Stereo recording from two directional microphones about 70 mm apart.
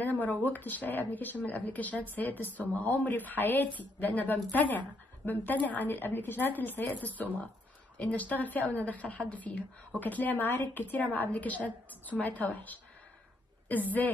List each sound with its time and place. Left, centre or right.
0.0 s speech: left